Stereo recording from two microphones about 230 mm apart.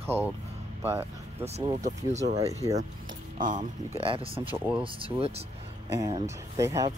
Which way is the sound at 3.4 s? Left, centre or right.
Right.